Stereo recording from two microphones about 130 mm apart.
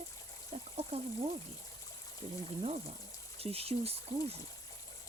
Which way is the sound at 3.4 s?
50° right (ahead or behind).